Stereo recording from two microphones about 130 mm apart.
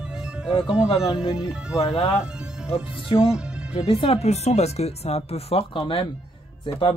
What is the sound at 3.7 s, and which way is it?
Speech, 45° left (ahead or behind).